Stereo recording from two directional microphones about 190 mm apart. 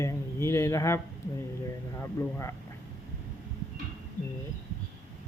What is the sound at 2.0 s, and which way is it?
Speech, 15° left (ahead or behind).